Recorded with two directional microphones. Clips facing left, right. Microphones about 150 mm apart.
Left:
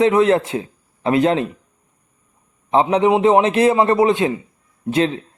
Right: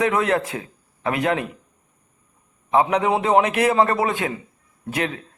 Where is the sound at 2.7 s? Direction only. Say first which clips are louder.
Left 4 dB; 25° left (ahead or behind).